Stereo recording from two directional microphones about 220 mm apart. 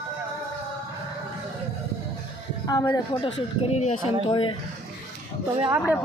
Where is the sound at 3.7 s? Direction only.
30° left (ahead or behind).